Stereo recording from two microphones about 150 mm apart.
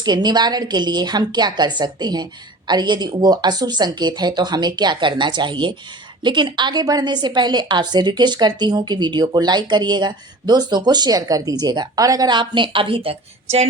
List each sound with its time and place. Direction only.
0.0 s a woman's voice: 30° right (ahead or behind)